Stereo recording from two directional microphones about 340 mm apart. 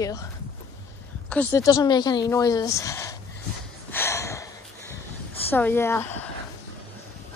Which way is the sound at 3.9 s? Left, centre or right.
Centre.